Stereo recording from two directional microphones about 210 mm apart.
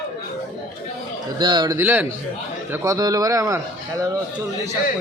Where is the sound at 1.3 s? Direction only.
20° right (ahead or behind).